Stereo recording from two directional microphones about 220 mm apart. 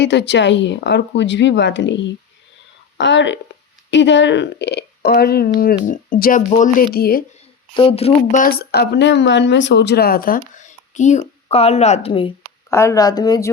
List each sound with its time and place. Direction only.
0.0 s a woman's voice: 50° left (ahead or behind)
7.7 s speech: 25° left (ahead or behind)
12.7 s speech: 15° left (ahead or behind)